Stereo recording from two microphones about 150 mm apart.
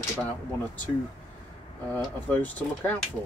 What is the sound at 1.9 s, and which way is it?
Speech, 10° left (ahead or behind).